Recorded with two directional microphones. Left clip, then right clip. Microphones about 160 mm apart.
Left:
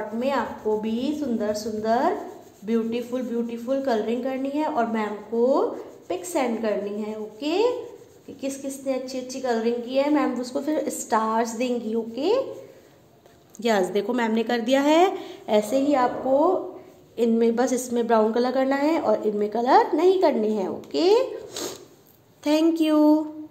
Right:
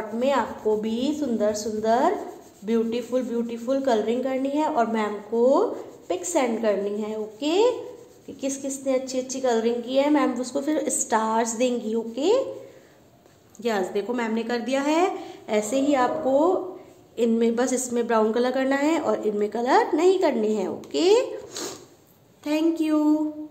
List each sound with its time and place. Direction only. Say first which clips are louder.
0.2 s a woman's voice: right 3 dB; 5° right (ahead or behind)
13.6 s a woman's voice: left 3 dB; 35° left (ahead or behind)
15.6 s a woman's voice: right 3 dB; 5° left (ahead or behind)
22.4 s a woman's voice: left 3 dB; 35° left (ahead or behind)